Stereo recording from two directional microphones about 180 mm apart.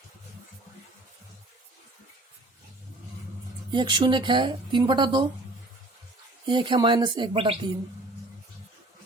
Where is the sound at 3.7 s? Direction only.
25° right (ahead or behind).